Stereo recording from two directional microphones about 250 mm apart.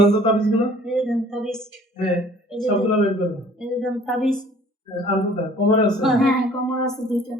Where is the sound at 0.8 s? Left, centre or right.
Centre.